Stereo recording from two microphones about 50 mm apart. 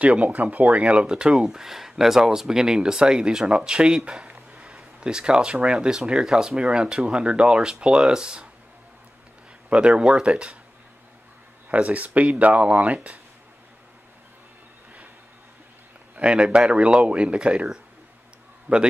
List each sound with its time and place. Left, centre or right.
0.0 s speech: right
9.7 s speech: right
11.7 s speech: right
16.2 s speech: right